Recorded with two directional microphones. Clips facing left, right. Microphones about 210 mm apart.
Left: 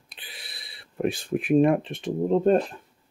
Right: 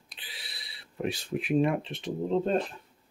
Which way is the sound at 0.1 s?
50° left (ahead or behind).